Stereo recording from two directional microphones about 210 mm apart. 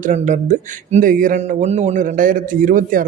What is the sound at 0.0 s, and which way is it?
Speech, 35° right (ahead or behind).